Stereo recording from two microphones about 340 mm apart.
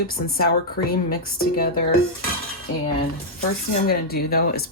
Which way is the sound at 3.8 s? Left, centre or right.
Left.